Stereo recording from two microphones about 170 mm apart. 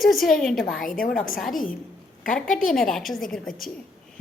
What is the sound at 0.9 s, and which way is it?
Speech, 55° left (ahead or behind).